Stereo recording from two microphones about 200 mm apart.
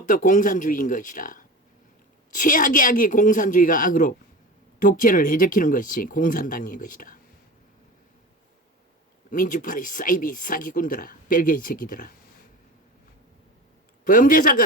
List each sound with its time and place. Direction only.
0.0 s speech: 40° left (ahead or behind)
9.3 s speech: 40° left (ahead or behind)
14.0 s speech: 45° left (ahead or behind)